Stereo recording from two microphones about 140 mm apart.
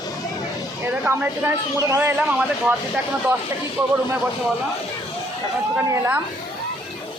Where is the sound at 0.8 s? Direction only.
15° right (ahead or behind).